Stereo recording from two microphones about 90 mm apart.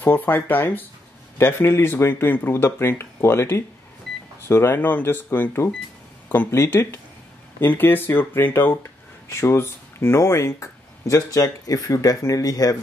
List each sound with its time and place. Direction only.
0.0 s speech: 25° left (ahead or behind)
6.2 s a sound: 20° left (ahead or behind)
6.5 s speech: 30° left (ahead or behind)